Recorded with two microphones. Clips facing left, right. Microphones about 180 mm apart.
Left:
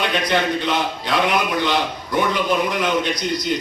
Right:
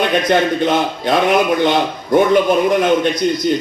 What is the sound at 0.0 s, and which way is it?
A man's voice, 50° right (ahead or behind).